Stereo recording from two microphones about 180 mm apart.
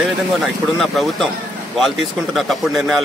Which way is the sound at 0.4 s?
Centre (ahead or behind).